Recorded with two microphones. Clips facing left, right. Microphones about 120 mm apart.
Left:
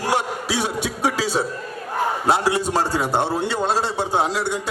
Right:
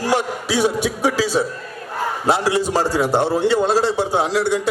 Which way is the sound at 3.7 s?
25° left (ahead or behind).